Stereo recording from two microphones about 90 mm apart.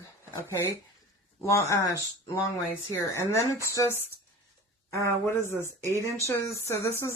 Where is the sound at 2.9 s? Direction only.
30° left (ahead or behind).